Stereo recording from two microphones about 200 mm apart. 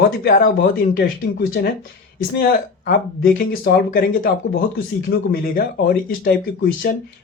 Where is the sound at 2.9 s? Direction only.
50° left (ahead or behind).